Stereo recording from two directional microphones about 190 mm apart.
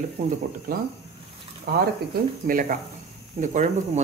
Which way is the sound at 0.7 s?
50° right (ahead or behind).